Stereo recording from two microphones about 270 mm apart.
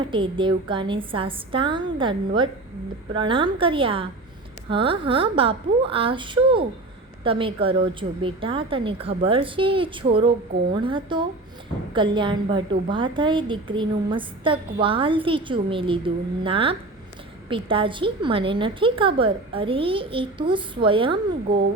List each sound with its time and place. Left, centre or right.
0.1 s a woman's voice: centre